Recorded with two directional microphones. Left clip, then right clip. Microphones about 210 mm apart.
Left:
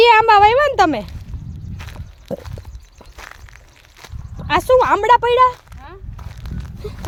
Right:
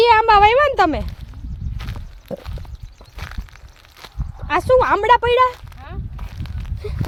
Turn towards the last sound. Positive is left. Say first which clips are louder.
# right 1 dB
turn(degrees=10)  # may be behind; listen again after turning